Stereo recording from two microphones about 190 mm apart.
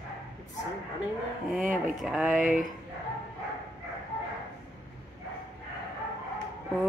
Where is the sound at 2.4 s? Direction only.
45° right (ahead or behind).